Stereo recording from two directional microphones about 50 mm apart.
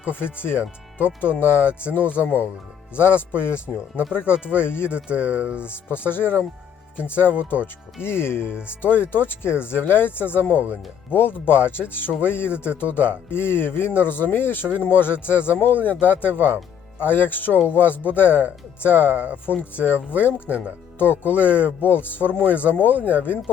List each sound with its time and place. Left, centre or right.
0.1 s speech: left
4.9 s speech: right
5.6 s speech: left
8.0 s speech: left